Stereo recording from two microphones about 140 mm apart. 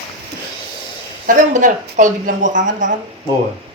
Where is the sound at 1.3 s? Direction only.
65° right (ahead or behind).